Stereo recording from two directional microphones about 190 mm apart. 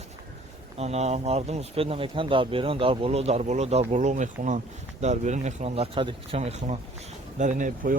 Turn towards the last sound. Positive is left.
turn(degrees=-45)  # may be behind; listen again after turning